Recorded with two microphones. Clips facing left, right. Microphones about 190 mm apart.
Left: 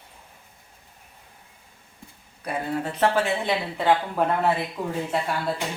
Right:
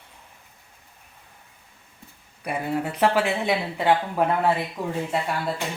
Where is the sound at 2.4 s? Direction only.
10° right (ahead or behind).